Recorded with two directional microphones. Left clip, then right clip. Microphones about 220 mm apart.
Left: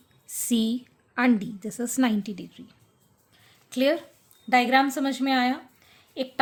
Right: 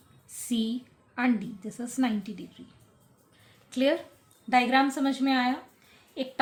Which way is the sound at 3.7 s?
40° left (ahead or behind).